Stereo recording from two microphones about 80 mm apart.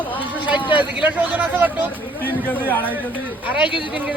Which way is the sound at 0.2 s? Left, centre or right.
Right.